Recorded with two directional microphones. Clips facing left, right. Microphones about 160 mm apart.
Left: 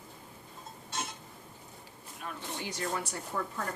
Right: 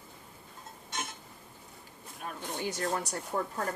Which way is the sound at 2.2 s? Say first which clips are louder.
Right 4 dB; 45° right (ahead or behind).